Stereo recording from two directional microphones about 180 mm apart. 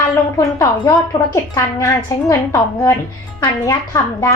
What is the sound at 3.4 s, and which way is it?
Speech, 20° left (ahead or behind).